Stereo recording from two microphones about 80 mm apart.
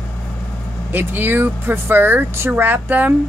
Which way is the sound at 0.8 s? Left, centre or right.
Right.